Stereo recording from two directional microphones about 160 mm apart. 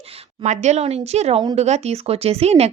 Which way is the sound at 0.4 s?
45° right (ahead or behind).